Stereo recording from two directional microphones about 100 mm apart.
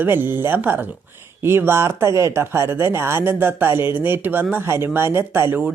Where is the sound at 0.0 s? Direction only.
20° right (ahead or behind).